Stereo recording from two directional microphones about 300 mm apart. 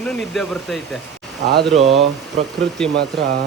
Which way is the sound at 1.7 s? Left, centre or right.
Centre.